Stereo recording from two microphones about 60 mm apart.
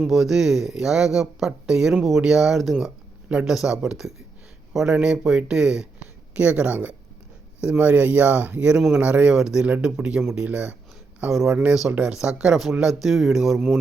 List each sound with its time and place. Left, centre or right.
0.0 s a man's voice: centre; by 9.3 s right
9.3 s speech: centre